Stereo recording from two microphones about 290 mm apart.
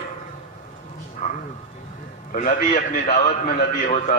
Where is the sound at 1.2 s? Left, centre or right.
Left.